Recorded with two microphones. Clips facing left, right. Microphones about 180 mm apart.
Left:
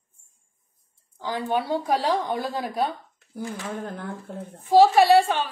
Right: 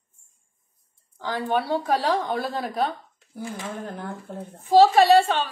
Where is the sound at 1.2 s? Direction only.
15° left (ahead or behind).